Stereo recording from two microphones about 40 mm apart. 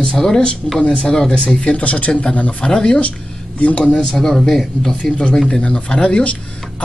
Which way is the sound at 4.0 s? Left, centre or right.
Centre.